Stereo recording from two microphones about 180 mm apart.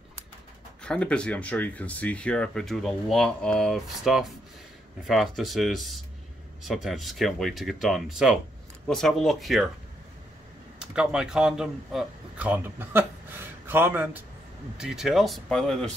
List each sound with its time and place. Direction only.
0.8 s speech: 5° left (ahead or behind)
10.8 s speech: 5° right (ahead or behind)